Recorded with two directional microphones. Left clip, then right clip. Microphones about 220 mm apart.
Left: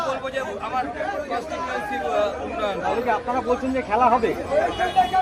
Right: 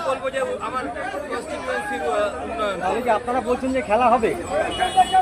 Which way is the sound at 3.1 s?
40° right (ahead or behind).